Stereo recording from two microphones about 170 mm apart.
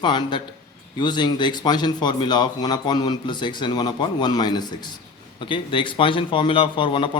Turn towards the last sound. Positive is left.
turn(degrees=30)  # may be behind; listen again after turning